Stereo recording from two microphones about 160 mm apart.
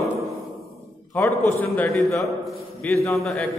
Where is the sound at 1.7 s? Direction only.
Centre (ahead or behind).